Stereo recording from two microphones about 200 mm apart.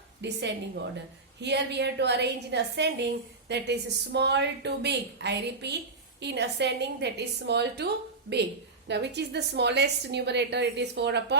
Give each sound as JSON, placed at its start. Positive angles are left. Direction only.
{"t": 0.2, "sound": "a woman's voice", "side_deg": -60}
{"t": 8.9, "sound": "a woman's voice", "side_deg": -55}